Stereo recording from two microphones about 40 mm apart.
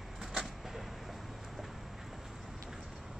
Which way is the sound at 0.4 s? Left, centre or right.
Centre.